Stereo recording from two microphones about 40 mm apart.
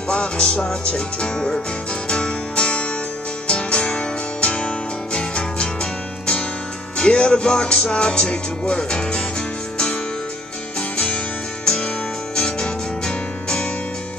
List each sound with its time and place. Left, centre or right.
0.1 s music: left
5.1 s music: left
7.0 s music: left
11.6 s music: centre